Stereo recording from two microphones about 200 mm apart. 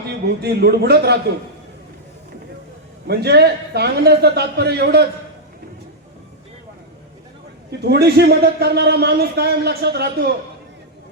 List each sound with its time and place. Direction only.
0.4 s a man's voice: 55° right (ahead or behind)
3.1 s a man's voice: 55° right (ahead or behind)
7.7 s a man's voice: 55° right (ahead or behind)